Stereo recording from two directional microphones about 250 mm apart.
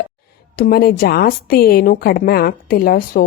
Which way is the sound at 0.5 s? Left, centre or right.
Left.